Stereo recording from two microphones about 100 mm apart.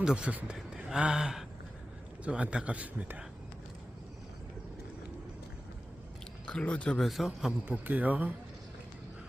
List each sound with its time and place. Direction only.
0.0 s a man's voice: 10° right (ahead or behind)
6.4 s speech: 10° left (ahead or behind)
7.0 s a man's voice: centre (ahead or behind)
7.6 s a man's voice: 20° right (ahead or behind)